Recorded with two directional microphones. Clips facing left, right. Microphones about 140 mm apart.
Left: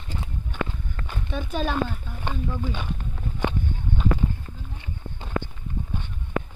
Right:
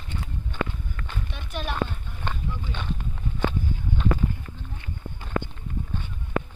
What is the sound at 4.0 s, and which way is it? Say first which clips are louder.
Clip-clop: even; centre (ahead or behind).